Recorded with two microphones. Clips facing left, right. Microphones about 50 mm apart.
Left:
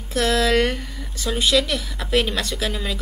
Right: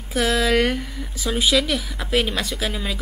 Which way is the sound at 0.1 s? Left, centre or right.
Centre.